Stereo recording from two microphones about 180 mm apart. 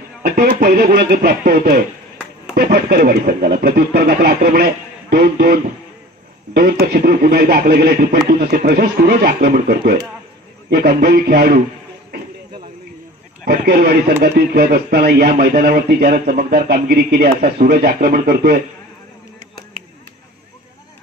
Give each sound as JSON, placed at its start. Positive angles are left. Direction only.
{"t": 0.2, "sound": "speech", "side_deg": -50}
{"t": 13.5, "sound": "speech", "side_deg": -60}